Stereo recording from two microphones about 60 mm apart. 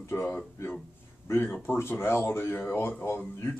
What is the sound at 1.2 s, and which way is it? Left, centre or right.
Speech, left.